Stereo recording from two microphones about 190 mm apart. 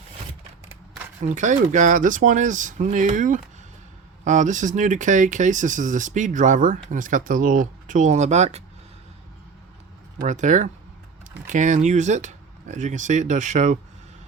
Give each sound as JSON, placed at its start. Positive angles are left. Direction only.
{"t": 1.3, "sound": "speech", "side_deg": -40}
{"t": 10.2, "sound": "speech", "side_deg": -40}